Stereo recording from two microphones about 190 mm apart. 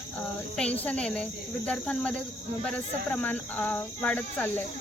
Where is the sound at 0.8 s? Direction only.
5° left (ahead or behind).